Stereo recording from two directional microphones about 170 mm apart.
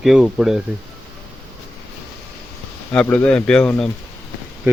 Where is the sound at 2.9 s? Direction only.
10° left (ahead or behind).